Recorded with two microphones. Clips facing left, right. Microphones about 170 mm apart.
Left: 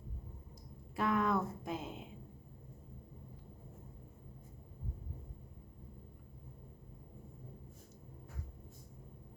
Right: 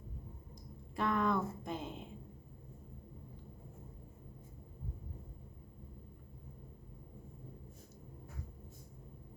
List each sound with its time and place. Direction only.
0.9 s speech: 5° left (ahead or behind)